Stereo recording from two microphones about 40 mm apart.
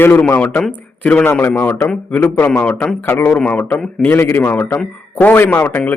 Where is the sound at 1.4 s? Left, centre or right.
Left.